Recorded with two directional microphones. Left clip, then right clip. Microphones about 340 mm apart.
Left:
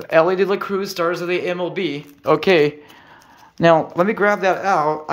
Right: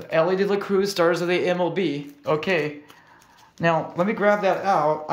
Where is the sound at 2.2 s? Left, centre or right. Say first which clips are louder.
Left 8 dB; centre.